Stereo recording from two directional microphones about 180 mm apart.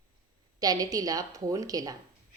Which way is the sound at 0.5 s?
20° right (ahead or behind).